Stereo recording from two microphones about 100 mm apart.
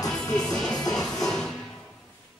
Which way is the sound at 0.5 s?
5° left (ahead or behind).